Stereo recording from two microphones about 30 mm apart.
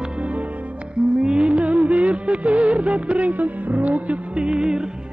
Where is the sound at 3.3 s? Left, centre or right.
Right.